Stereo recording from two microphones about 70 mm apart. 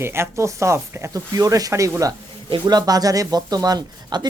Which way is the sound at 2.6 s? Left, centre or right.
Right.